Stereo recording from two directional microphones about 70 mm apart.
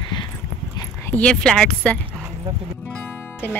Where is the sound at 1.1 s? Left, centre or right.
Centre.